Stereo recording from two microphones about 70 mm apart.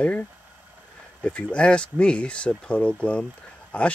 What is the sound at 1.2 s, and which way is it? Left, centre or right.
Speech, centre.